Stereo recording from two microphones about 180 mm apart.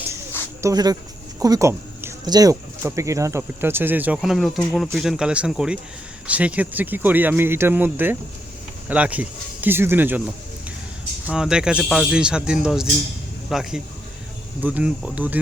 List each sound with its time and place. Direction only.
0.6 s speech: 20° right (ahead or behind)
11.3 s speech: 5° right (ahead or behind)